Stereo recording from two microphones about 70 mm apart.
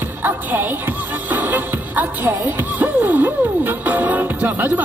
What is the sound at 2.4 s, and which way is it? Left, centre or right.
Music, right.